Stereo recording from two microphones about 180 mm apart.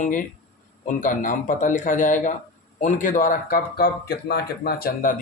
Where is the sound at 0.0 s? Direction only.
45° left (ahead or behind).